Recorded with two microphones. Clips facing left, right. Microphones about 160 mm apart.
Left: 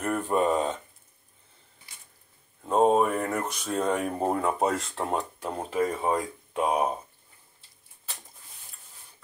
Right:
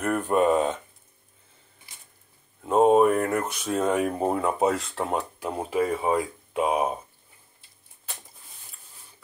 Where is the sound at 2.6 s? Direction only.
5° right (ahead or behind).